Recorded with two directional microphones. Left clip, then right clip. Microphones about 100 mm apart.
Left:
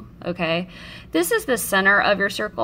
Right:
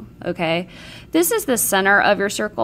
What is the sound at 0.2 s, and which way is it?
A woman's voice, 25° right (ahead or behind).